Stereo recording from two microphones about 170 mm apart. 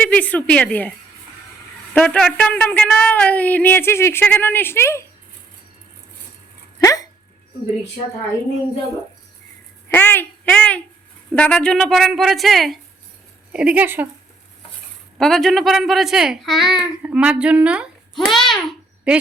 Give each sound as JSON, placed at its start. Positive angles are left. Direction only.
{"t": 0.0, "sound": "a woman's voice", "side_deg": 10}
{"t": 6.7, "sound": "speech", "side_deg": 20}
{"t": 9.9, "sound": "a woman's voice", "side_deg": 10}
{"t": 15.2, "sound": "a child's voice", "side_deg": 0}